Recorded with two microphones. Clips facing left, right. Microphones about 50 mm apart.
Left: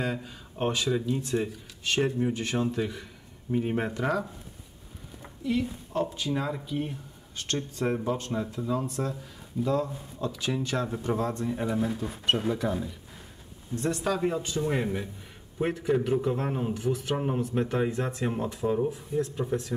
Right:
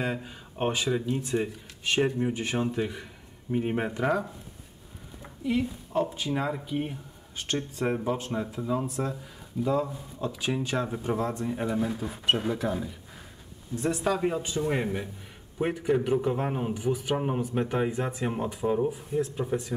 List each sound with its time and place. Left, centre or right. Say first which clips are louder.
0.0 s speech: even; right
1.0 s speech: even; right
1.3 s speech: even; centre
5.4 s speech: right 1 dB; centre